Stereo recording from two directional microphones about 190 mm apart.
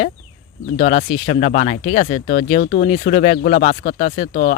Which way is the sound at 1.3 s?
40° left (ahead or behind).